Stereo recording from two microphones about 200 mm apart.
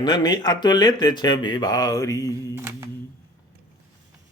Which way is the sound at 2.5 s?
10° right (ahead or behind).